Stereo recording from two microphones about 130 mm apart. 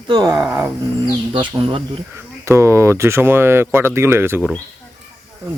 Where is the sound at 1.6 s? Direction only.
40° right (ahead or behind).